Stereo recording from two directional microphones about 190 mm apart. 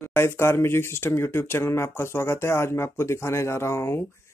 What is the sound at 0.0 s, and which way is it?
Speech, 10° left (ahead or behind).